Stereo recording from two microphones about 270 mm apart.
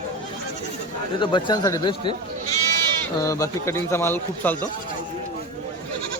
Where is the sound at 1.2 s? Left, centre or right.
Centre.